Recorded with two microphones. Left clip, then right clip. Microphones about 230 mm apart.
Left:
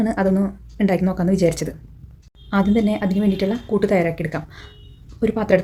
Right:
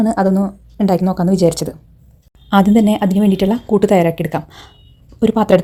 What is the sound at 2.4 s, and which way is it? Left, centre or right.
Speech, right.